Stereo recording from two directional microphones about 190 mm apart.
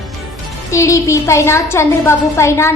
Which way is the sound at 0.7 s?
15° left (ahead or behind).